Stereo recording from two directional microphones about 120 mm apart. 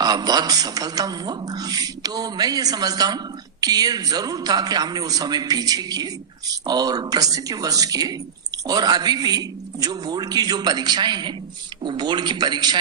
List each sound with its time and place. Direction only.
0.0 s a woman's voice: 35° right (ahead or behind)